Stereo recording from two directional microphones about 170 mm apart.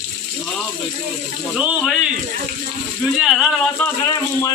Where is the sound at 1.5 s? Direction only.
5° right (ahead or behind).